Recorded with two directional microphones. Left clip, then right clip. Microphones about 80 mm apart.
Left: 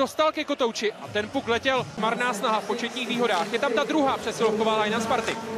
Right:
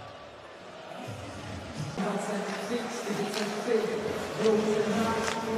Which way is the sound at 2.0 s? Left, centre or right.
Right.